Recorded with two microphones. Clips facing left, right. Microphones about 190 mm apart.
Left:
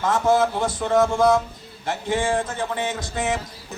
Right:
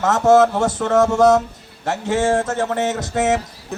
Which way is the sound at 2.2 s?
45° right (ahead or behind).